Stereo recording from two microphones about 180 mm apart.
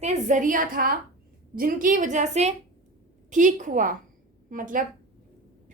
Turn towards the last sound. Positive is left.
turn(degrees=-50)  # may be behind; listen again after turning